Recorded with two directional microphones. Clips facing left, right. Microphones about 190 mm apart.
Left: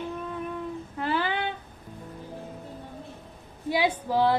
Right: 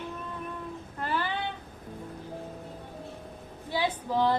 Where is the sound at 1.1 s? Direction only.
80° left.